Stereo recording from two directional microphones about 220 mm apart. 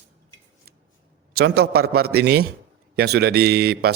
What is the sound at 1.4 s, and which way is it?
Speech, 45° right (ahead or behind).